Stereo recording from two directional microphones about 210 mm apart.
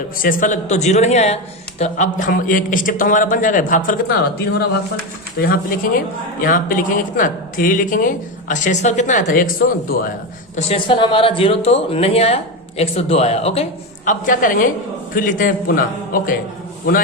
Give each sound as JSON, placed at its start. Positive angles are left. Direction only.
{"t": 0.2, "sound": "speech", "side_deg": 40}
{"t": 10.5, "sound": "speech", "side_deg": 30}